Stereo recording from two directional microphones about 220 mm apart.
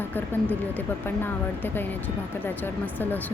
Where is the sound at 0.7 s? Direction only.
10° left (ahead or behind).